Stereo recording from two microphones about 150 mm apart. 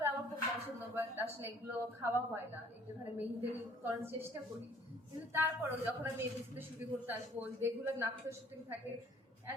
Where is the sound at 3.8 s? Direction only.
15° right (ahead or behind).